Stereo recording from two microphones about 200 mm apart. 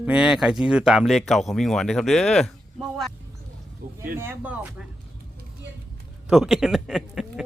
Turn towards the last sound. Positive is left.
turn(degrees=0)  # may be behind; listen again after turning